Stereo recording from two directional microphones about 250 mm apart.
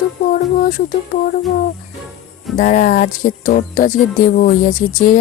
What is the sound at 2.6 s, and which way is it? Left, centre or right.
Music, left.